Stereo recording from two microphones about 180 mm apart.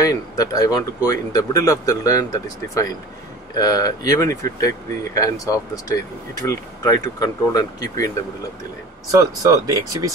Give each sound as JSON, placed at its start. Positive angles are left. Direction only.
{"t": 0.0, "sound": "speech", "side_deg": 20}
{"t": 9.1, "sound": "speech", "side_deg": -20}